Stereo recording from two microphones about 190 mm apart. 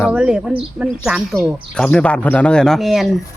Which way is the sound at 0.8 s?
5° right (ahead or behind).